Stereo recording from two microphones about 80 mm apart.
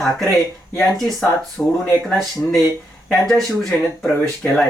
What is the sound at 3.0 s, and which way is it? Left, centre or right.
A woman's voice, centre.